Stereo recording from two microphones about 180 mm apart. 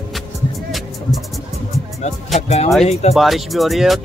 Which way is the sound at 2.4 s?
35° left (ahead or behind).